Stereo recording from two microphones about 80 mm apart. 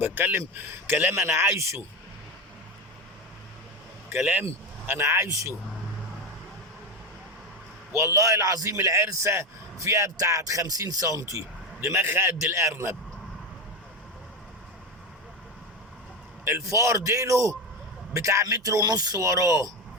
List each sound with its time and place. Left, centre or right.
0.0 s speech: right
4.1 s a man's voice: right
7.9 s a man's voice: right
16.4 s a man's voice: right